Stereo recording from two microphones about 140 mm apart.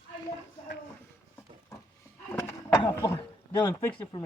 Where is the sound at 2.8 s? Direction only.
25° left (ahead or behind).